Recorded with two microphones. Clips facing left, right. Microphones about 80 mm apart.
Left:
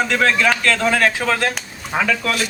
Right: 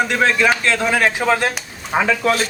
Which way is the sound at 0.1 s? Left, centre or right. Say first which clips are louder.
Right 1 dB; right.